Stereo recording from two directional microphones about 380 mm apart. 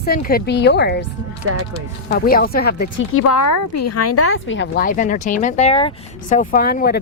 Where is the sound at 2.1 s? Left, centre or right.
Left.